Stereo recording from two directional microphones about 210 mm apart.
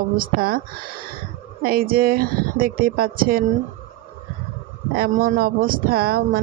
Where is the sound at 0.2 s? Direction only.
45° right (ahead or behind).